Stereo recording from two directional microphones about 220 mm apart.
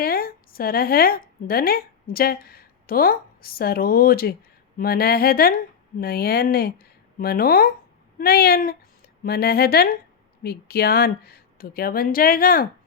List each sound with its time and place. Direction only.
0.0 s a woman's voice: 40° left (ahead or behind)